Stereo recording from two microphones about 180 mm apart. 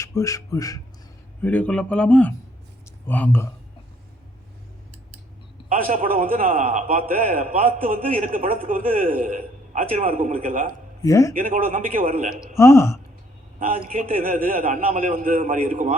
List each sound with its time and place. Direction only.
0.0 s speech: 15° left (ahead or behind)
1.4 s a man's voice: 10° left (ahead or behind)
5.8 s a man's voice: 50° right (ahead or behind)
11.0 s a man's voice: 15° left (ahead or behind)
11.4 s a man's voice: 50° right (ahead or behind)
12.5 s a man's voice: 15° left (ahead or behind)
13.6 s a man's voice: 50° right (ahead or behind)